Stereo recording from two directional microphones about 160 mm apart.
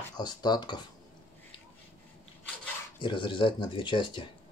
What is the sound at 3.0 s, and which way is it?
Speech, 30° left (ahead or behind).